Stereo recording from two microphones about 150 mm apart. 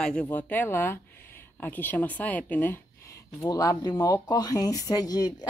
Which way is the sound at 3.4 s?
25° left (ahead or behind).